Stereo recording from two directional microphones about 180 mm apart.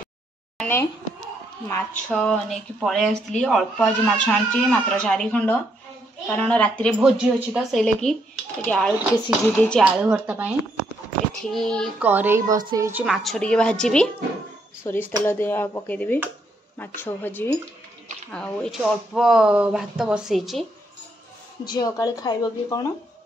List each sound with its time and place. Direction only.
0.6 s a sound: 10° left (ahead or behind)
1.7 s speech: 5° left (ahead or behind)
7.0 s speech: 5° right (ahead or behind)
9.9 s speech: 5° right (ahead or behind)
11.5 s speech: 5° left (ahead or behind)
12.0 s speech: 10° right (ahead or behind)
13.0 s speech: centre (ahead or behind)
21.6 s speech: 20° left (ahead or behind)